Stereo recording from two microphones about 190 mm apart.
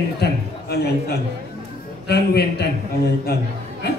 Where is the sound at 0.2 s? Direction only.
60° left (ahead or behind).